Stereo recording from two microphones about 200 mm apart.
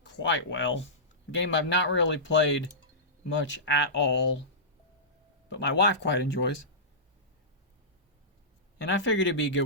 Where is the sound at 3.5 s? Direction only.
65° left (ahead or behind).